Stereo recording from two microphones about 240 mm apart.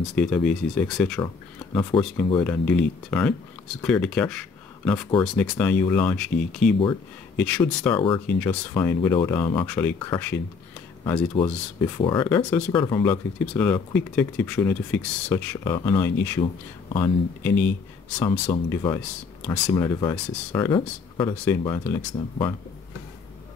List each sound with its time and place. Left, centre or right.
0.0 s speech: centre
12.4 s speech: centre
12.7 s speech: centre
13.0 s speech: centre